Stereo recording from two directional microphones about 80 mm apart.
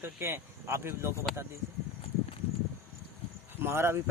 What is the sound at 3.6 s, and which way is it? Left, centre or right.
Speech, right.